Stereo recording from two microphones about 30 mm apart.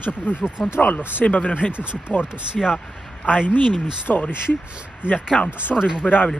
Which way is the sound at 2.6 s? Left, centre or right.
Centre.